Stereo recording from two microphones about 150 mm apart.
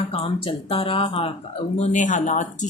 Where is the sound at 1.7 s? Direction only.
50° left (ahead or behind).